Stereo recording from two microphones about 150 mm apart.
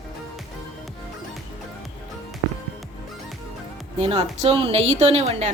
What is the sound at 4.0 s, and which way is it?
Speech, 45° right (ahead or behind).